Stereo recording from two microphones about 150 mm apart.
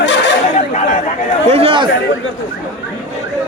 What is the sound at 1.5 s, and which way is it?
Speech, 40° right (ahead or behind).